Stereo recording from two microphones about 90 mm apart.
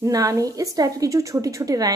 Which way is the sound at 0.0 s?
40° right (ahead or behind).